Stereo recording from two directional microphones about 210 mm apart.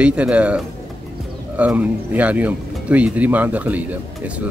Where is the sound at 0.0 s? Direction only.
5° right (ahead or behind).